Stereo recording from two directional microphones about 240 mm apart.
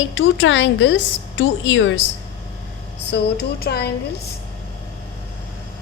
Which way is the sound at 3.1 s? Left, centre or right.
Left.